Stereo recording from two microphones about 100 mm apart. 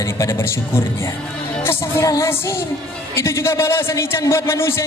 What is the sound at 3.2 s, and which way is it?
Speech, 25° left (ahead or behind).